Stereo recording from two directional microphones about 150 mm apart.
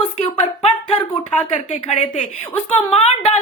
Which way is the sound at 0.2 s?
40° left (ahead or behind).